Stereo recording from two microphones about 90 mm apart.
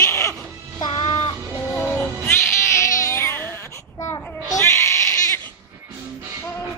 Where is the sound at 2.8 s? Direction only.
35° left (ahead or behind).